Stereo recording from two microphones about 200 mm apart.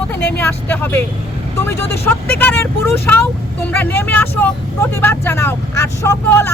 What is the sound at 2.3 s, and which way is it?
Speech, 10° left (ahead or behind).